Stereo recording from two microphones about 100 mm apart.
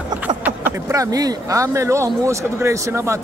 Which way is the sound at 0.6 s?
30° right (ahead or behind).